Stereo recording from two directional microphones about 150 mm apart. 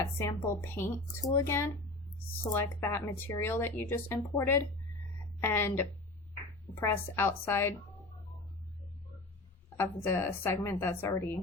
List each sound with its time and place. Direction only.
0.0 s speech: 20° left (ahead or behind)
9.7 s speech: 15° left (ahead or behind)